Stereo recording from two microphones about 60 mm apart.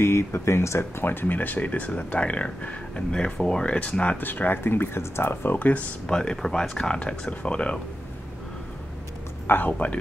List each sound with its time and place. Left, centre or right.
0.0 s speech: left
4.2 s speech: left
6.0 s speech: centre
9.5 s speech: left